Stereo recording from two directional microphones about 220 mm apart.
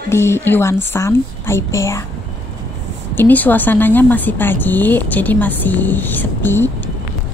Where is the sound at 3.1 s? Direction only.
10° left (ahead or behind).